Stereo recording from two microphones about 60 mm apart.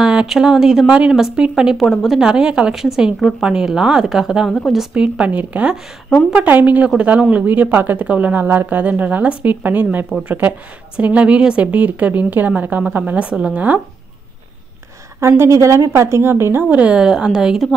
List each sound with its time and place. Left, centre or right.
0.0 s a woman's voice: centre
4.5 s a woman's voice: centre
4.9 s speech: centre
15.1 s a woman's voice: right
16.6 s speech: right
17.0 s speech: centre